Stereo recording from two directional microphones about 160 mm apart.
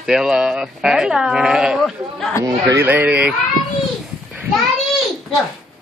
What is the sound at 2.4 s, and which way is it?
Speech, 25° right (ahead or behind).